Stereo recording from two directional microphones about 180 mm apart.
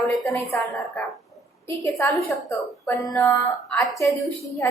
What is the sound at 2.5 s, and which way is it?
A woman's voice, 15° left (ahead or behind).